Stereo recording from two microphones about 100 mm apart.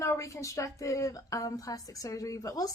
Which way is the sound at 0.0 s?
30° left (ahead or behind).